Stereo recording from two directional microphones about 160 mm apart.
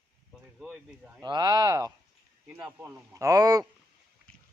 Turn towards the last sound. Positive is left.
turn(degrees=-20)  # may be behind; listen again after turning